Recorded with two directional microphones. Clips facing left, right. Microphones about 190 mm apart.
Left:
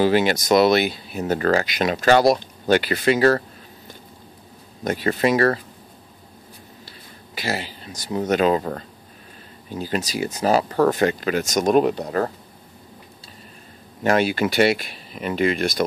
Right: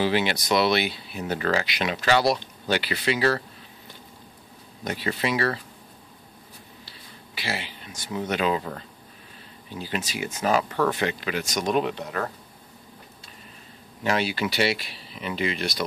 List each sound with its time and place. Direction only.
0.0 s speech: 45° left (ahead or behind)
4.8 s speech: 45° left (ahead or behind)
6.9 s speech: 45° left (ahead or behind)
14.0 s speech: 50° left (ahead or behind)